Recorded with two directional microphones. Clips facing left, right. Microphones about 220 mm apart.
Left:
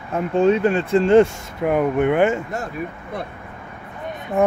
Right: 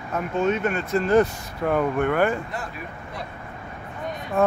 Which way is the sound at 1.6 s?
15° left (ahead or behind).